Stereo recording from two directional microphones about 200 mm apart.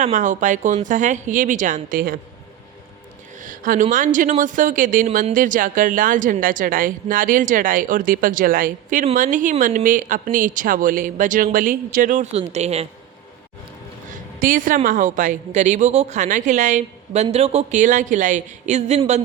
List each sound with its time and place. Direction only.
0.0 s speech: 40° right (ahead or behind)
3.4 s speech: 45° right (ahead or behind)
14.1 s speech: 40° right (ahead or behind)